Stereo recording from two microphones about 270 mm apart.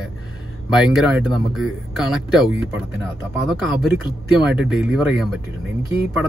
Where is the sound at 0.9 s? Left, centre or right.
Centre.